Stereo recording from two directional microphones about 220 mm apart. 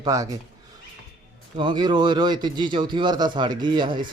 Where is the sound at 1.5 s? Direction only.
20° right (ahead or behind).